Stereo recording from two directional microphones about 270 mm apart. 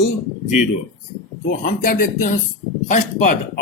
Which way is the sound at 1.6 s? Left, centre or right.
Left.